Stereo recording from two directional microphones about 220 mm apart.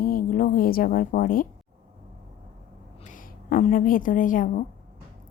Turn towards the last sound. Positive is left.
turn(degrees=35)  # may be behind; listen again after turning